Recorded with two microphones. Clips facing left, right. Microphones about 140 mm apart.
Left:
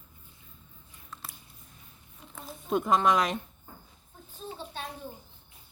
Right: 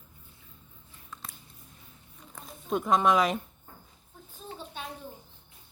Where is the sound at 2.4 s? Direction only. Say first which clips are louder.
Left 1 dB; centre (ahead or behind).